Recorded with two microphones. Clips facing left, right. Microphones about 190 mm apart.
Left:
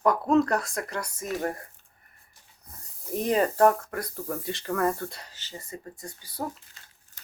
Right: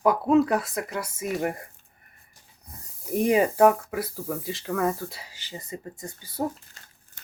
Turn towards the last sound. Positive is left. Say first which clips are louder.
# right 5 dB
turn(degrees=-25)  # may be behind; listen again after turning